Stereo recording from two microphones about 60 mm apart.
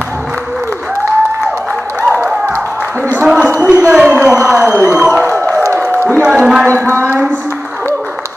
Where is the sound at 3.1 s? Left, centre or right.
Centre.